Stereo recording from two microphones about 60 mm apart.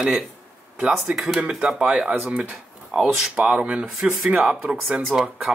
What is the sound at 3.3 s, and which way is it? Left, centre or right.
Speech, centre.